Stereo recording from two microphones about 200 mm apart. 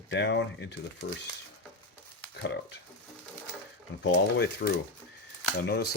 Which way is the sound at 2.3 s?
60° left (ahead or behind).